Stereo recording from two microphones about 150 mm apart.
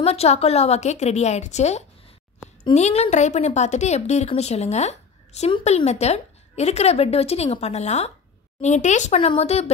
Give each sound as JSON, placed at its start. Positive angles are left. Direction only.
{"t": 0.0, "sound": "speech", "side_deg": 45}
{"t": 9.2, "sound": "speech", "side_deg": 40}